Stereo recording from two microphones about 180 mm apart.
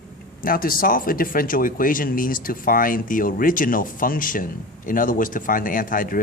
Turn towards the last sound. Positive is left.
turn(degrees=50)  # may be behind; listen again after turning